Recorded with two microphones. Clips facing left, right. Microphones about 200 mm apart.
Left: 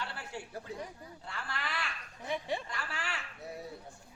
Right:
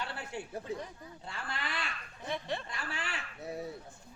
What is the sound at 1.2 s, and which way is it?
Speech, 20° right (ahead or behind).